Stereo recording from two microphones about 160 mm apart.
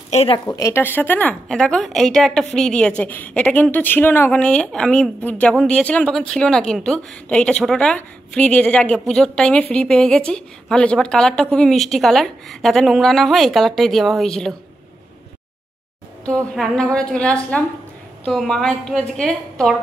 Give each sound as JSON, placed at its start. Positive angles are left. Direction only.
{"t": 0.1, "sound": "speech", "side_deg": 40}
{"t": 0.5, "sound": "a woman's voice", "side_deg": 20}
{"t": 16.3, "sound": "a woman's voice", "side_deg": 5}